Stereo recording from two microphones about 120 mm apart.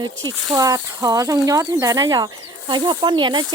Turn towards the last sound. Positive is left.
turn(degrees=-40)  # may be behind; listen again after turning